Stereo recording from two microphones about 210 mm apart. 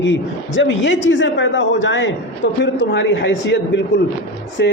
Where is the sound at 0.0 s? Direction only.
60° left (ahead or behind).